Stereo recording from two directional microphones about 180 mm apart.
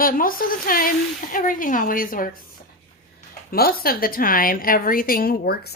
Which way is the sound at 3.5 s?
55° left (ahead or behind).